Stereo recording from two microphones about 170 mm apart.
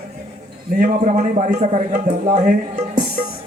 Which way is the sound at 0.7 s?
50° right (ahead or behind).